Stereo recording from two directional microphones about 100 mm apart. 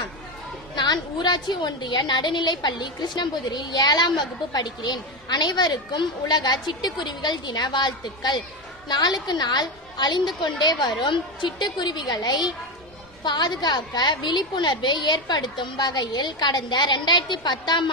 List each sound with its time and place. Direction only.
0.7 s a woman's voice: 45° left (ahead or behind)